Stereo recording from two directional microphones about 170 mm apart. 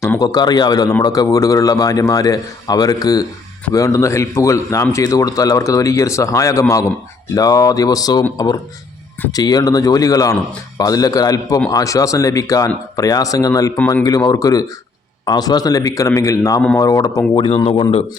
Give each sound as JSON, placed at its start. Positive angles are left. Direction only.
{"t": 0.0, "sound": "a man's voice", "side_deg": 20}
{"t": 9.3, "sound": "a man's voice", "side_deg": 20}